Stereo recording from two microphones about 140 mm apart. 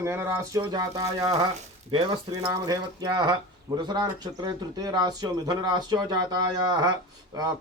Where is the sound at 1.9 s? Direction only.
35° right (ahead or behind).